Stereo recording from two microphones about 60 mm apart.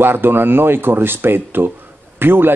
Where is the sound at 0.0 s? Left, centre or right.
Right.